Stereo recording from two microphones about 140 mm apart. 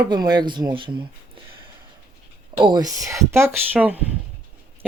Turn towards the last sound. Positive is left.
turn(degrees=-10)  # may be behind; listen again after turning